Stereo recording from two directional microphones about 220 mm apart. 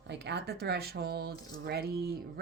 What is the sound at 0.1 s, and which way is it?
Speech, 50° right (ahead or behind).